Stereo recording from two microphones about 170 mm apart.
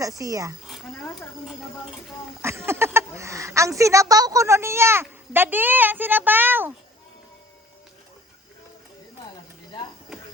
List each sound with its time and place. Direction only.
0.0 s speech: 20° right (ahead or behind)
2.4 s a woman's voice: 15° right (ahead or behind)